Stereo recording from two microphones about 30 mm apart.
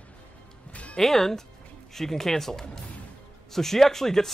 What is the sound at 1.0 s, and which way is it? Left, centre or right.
Speech, centre.